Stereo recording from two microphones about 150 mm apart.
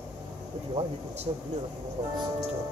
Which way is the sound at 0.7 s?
45° right (ahead or behind).